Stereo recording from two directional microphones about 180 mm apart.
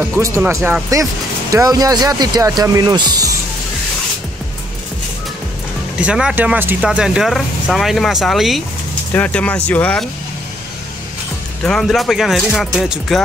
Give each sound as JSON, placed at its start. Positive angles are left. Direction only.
{"t": 0.0, "sound": "speech", "side_deg": -15}
{"t": 5.9, "sound": "speech", "side_deg": -5}
{"t": 11.6, "sound": "speech", "side_deg": 0}